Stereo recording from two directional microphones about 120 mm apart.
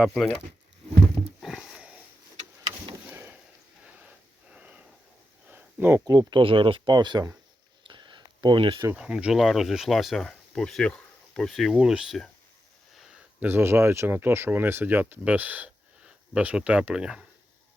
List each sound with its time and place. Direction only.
0.0 s speech: centre (ahead or behind)
1.4 s sniff: centre (ahead or behind)
3.1 s a sound: 15° right (ahead or behind)
6.1 s speech: 35° right (ahead or behind)
6.4 s speech: 50° right (ahead or behind)
7.9 s a sound: 40° right (ahead or behind)
8.9 s speech: 5° right (ahead or behind)